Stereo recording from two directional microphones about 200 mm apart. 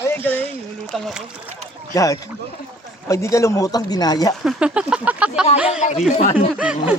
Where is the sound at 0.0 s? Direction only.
10° left (ahead or behind).